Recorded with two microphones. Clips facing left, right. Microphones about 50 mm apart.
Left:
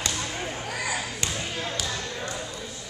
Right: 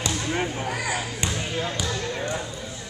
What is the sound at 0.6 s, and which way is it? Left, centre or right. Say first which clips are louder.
Basketball bounce: right 2 dB; centre.